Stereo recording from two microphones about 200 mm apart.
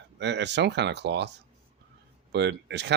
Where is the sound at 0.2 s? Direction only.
60° right (ahead or behind).